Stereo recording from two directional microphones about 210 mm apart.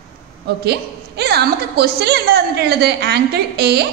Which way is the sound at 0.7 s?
50° right (ahead or behind).